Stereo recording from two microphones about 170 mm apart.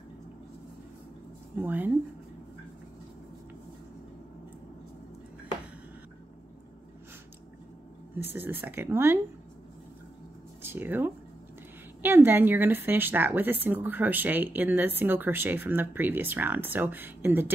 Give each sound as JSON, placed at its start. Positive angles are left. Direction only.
{"t": 1.6, "sound": "a woman's voice", "side_deg": -10}
{"t": 8.4, "sound": "a woman's voice", "side_deg": -10}
{"t": 10.6, "sound": "a woman's voice", "side_deg": -10}